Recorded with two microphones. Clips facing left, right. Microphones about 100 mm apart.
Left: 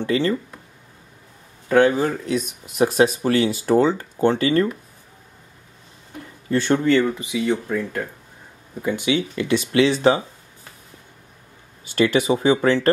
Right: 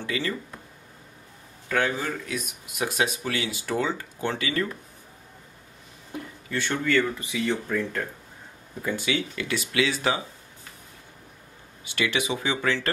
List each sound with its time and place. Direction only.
0.0 s speech: 35° left (ahead or behind)
1.7 s speech: 35° left (ahead or behind)
6.5 s speech: 35° left (ahead or behind)
7.0 s speech: 20° left (ahead or behind)
11.8 s speech: 40° left (ahead or behind)